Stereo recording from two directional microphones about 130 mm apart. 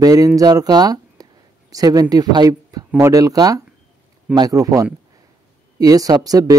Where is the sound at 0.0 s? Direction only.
30° right (ahead or behind).